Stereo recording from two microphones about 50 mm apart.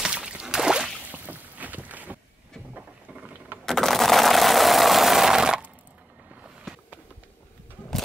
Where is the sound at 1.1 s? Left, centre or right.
Right.